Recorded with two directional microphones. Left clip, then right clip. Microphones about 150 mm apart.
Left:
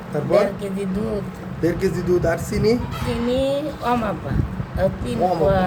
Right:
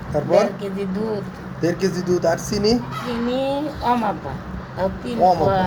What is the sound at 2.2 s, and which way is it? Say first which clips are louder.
Speech: right 1 dB; 15° right (ahead or behind).